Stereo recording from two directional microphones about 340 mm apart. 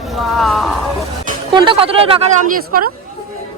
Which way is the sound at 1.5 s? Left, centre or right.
Centre.